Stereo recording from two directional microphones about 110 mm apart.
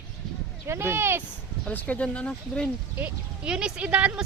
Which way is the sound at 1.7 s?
15° left (ahead or behind).